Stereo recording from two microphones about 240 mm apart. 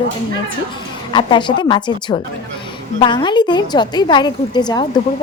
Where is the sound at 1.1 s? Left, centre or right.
Centre.